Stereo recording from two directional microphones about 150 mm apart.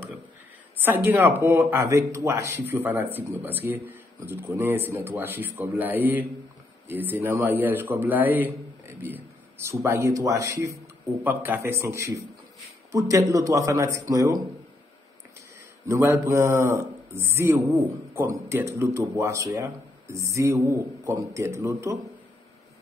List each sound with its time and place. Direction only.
0.8 s a man's voice: 10° right (ahead or behind)
15.9 s a man's voice: 20° right (ahead or behind)